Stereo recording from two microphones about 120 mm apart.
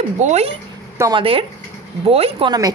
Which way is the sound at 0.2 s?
65° right (ahead or behind).